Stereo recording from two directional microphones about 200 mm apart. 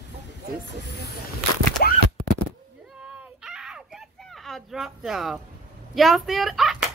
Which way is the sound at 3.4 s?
5° right (ahead or behind).